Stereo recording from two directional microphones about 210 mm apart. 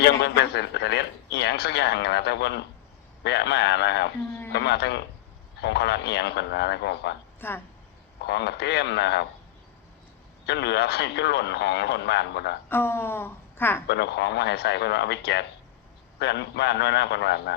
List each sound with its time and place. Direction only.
0.0 s a man's voice: 55° left (ahead or behind)
7.4 s speech: 10° left (ahead or behind)
8.2 s a man's voice: 55° left (ahead or behind)
10.4 s a man's voice: 55° left (ahead or behind)
12.6 s a woman's voice: 10° left (ahead or behind)
13.8 s a man's voice: 55° left (ahead or behind)